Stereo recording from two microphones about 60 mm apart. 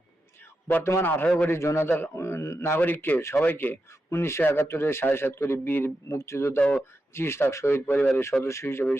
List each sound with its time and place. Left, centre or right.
1.0 s a man's voice: left
1.5 s a man's voice: left
2.1 s speech: left
3.2 s speech: left
3.4 s a man's voice: left
6.1 s speech: left
8.2 s speech: left
8.6 s a man's voice: left